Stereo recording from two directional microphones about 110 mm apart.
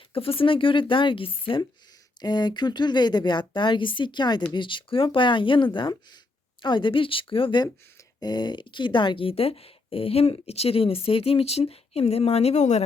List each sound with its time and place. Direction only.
0.1 s a woman's voice: 60° left (ahead or behind)
2.2 s a woman's voice: 40° left (ahead or behind)
8.2 s speech: 40° left (ahead or behind); by 12.8 s 90° left